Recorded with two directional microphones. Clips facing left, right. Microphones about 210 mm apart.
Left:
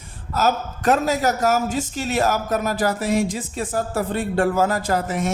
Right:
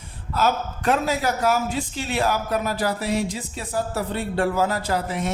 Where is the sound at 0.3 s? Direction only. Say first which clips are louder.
Left 1 dB; 40° left (ahead or behind).